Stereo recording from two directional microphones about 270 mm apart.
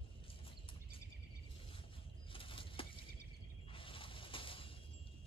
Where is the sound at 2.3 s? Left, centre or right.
Centre.